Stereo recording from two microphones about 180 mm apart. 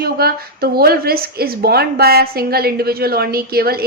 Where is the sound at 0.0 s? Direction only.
60° right (ahead or behind).